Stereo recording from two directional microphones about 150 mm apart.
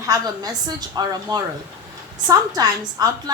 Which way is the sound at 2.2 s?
25° right (ahead or behind).